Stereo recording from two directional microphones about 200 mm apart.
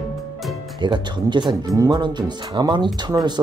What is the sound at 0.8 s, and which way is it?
Speech, 25° right (ahead or behind).